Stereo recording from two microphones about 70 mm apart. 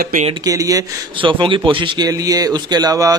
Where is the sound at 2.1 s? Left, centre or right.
Right.